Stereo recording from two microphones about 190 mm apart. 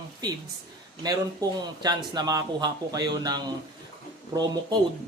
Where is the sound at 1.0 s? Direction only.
20° right (ahead or behind).